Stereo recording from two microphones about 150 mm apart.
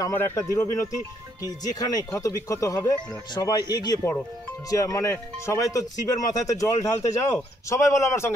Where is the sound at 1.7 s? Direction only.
25° left (ahead or behind).